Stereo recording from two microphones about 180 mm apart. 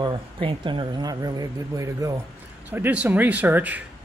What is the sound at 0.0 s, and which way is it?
Speech, 30° right (ahead or behind).